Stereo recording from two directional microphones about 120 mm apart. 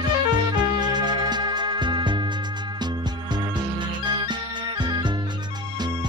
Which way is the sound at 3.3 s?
40° right (ahead or behind).